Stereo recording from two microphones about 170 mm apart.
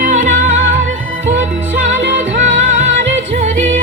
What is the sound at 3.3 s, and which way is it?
Music, 45° right (ahead or behind).